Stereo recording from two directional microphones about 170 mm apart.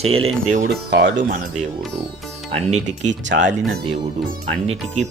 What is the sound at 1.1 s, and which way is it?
Speech, 50° right (ahead or behind).